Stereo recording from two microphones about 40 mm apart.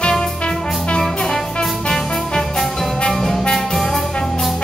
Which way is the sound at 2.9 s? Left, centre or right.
Centre.